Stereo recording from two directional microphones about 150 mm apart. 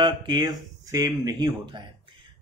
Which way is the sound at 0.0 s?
30° right (ahead or behind).